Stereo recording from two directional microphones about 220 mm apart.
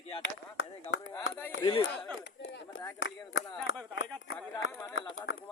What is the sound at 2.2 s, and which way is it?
Speech, 50° left (ahead or behind).